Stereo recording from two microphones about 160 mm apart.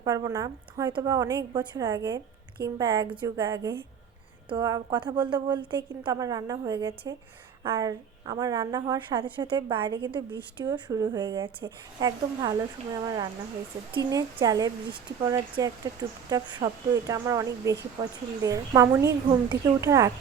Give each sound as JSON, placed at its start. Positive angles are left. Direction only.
{"t": 0.0, "sound": "speech", "side_deg": -20}
{"t": 7.6, "sound": "speech", "side_deg": -20}